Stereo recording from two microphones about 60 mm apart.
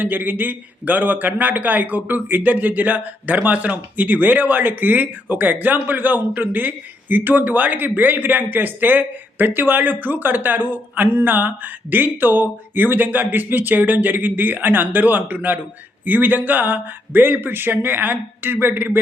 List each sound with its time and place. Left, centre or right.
0.0 s a man's voice: right